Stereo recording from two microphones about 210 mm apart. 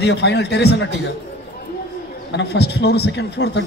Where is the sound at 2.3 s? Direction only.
55° left (ahead or behind).